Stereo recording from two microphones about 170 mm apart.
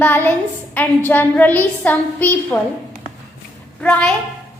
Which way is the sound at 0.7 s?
10° left (ahead or behind).